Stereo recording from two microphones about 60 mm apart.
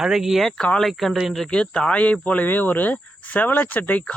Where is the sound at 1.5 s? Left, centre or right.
Centre.